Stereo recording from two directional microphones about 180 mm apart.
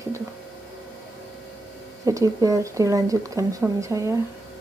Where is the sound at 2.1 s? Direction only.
20° right (ahead or behind).